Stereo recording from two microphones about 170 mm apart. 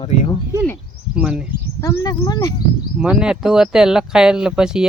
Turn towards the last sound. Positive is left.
turn(degrees=-5)  # may be behind; listen again after turning